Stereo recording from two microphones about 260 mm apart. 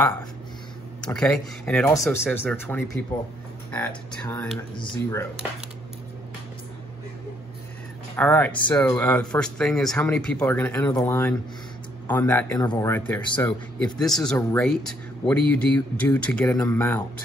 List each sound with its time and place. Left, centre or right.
1.0 s a man's voice: centre
4.7 s a man's voice: centre
8.2 s a man's voice: centre